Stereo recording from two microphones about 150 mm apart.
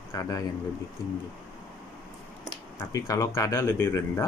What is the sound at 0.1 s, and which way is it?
Speech, 25° left (ahead or behind).